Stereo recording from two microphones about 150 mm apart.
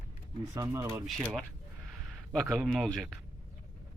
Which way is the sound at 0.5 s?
20° right (ahead or behind).